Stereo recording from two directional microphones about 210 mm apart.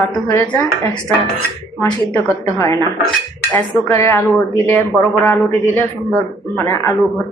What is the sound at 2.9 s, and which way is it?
Dishes, 5° left (ahead or behind).